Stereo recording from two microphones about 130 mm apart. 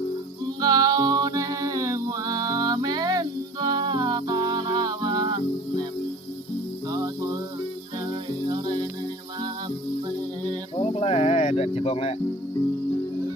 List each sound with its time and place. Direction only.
0.6 s music: 30° right (ahead or behind)
6.8 s music: 30° right (ahead or behind)
8.1 s music: 35° right (ahead or behind)
10.8 s a sound: 50° left (ahead or behind)